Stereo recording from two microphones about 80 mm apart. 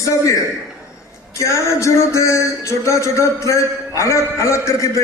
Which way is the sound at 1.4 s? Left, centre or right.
Left.